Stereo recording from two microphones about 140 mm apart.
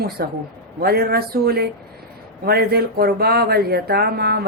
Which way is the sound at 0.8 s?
90° right.